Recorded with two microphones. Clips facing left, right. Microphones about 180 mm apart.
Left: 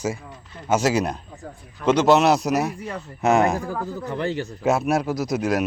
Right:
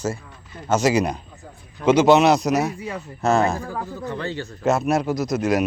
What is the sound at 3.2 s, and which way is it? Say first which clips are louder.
A man's voice: left 1 dB; 20° left (ahead or behind).